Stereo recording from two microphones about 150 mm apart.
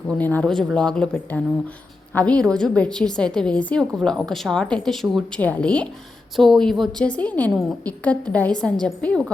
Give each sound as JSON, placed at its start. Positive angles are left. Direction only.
{"t": 0.1, "sound": "a woman's voice", "side_deg": 10}